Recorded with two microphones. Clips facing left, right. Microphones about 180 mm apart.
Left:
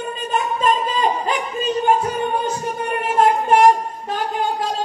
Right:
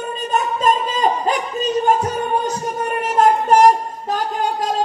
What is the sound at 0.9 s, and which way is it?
Music, 40° right (ahead or behind).